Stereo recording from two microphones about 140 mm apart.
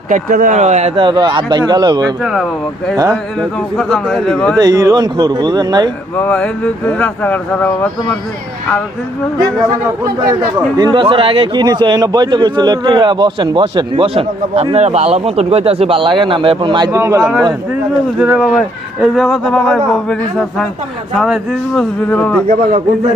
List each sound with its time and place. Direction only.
0.1 s speech: 75° right (ahead or behind); by 0.9 s 55° right (ahead or behind)
0.9 s speech: 35° right (ahead or behind)
2.2 s speech: centre (ahead or behind)
2.9 s speech: 25° right (ahead or behind)
3.8 s speech: 5° left (ahead or behind)
4.5 s speech: 25° right (ahead or behind)
6.1 s speech: 10° left (ahead or behind)
10.8 s speech: 30° right (ahead or behind)
16.9 s speech: 20° right (ahead or behind)
18.2 s speech: 10° right (ahead or behind)
21.2 s speech: 5° right (ahead or behind)
22.1 s speech: 10° left (ahead or behind)
22.4 s a man's voice: 65° right (ahead or behind)